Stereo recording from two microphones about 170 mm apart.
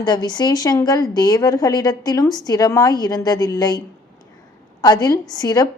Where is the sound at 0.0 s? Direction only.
25° left (ahead or behind).